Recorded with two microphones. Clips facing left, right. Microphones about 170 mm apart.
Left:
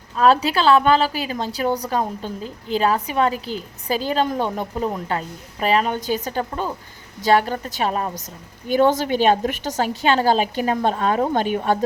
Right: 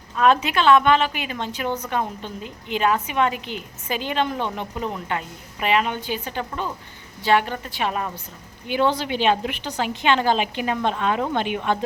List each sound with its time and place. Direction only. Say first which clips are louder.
0.2 s a woman's voice: left 2 dB; 35° left (ahead or behind)